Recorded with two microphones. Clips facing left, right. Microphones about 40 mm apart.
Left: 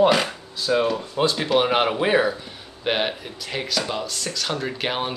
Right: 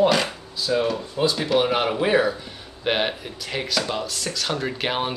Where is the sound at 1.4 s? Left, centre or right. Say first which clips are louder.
Left 2 dB; left.